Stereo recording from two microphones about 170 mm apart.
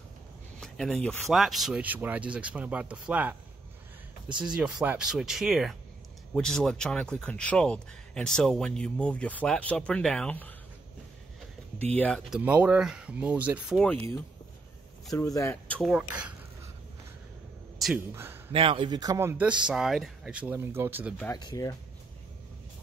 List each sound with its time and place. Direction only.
0.6 s speech: centre (ahead or behind)
4.4 s speech: 5° right (ahead or behind)
11.8 s speech: 10° left (ahead or behind)
12.3 s speech: 10° right (ahead or behind)
15.1 s speech: 20° left (ahead or behind)
15.8 s speech: 5° right (ahead or behind)
17.7 s a sound: centre (ahead or behind)
18.1 s a man's voice: 15° right (ahead or behind)
18.5 s speech: 30° right (ahead or behind); by 21.1 s 10° right (ahead or behind)
21.4 s speech: 20° left (ahead or behind)